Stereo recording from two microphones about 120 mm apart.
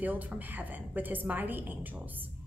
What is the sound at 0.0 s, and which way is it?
A woman's voice, 15° right (ahead or behind).